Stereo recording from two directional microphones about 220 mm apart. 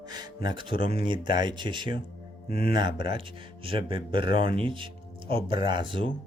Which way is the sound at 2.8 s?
20° right (ahead or behind).